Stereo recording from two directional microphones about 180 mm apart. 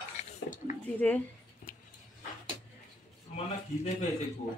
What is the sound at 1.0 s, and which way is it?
Speech, 5° left (ahead or behind).